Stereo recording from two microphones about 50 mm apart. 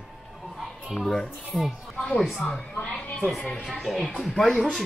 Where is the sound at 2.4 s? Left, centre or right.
Centre.